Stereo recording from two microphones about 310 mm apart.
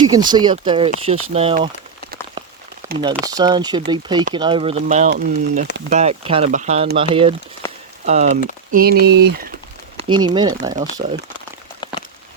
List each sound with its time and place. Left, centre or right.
0.3 s speech: centre
2.8 s crumpling: centre
3.2 s speech: centre
7.6 s a sound: centre
8.0 s speech: right
10.0 s speech: centre
11.0 s speech: right